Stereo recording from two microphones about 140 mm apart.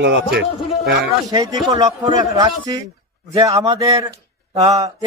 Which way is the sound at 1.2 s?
25° right (ahead or behind).